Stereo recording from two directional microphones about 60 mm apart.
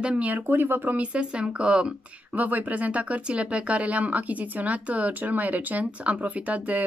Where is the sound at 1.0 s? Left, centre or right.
Centre.